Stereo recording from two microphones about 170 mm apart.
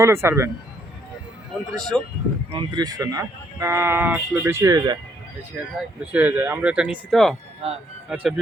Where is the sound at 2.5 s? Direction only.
25° right (ahead or behind).